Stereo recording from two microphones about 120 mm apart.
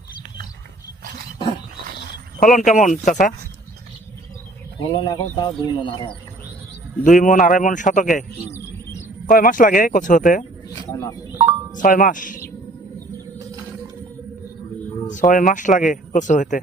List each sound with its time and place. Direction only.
2.4 s speech: 90° left
4.8 s speech: 40° left (ahead or behind)
7.0 s speech: 90° left
8.4 s a sound: 20° left (ahead or behind)
9.2 s speech: 90° left
10.9 s speech: 30° left (ahead or behind)
11.7 s speech: 90° left
15.1 s speech: 90° left